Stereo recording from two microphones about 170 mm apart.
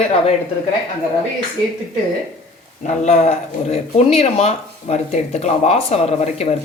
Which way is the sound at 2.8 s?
40° left (ahead or behind).